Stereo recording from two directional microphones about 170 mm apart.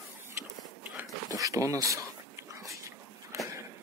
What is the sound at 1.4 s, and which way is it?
Dog, 20° right (ahead or behind).